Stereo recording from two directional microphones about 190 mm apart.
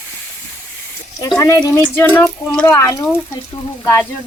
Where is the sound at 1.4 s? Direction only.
15° left (ahead or behind).